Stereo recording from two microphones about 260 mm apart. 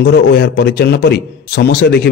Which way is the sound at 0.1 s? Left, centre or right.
Left.